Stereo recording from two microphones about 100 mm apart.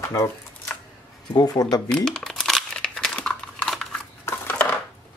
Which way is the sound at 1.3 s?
45° left (ahead or behind).